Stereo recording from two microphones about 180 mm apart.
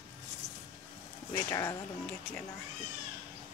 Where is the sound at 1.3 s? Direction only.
15° left (ahead or behind).